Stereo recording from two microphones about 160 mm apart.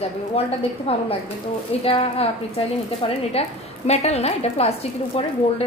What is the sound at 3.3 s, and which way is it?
Speech, 40° left (ahead or behind).